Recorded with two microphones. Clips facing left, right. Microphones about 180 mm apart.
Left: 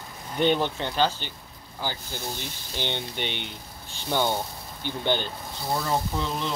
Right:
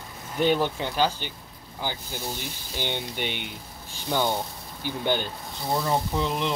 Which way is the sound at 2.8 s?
10° right (ahead or behind).